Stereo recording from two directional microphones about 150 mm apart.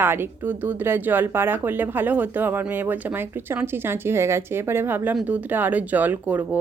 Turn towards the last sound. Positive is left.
turn(degrees=-10)  # may be behind; listen again after turning